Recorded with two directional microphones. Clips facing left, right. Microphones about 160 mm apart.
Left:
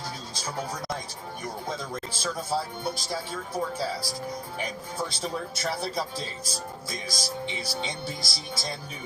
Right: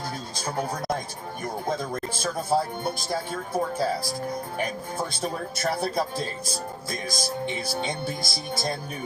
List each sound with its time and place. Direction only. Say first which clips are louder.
0.3 s speech: right 4 dB; 55° right (ahead or behind)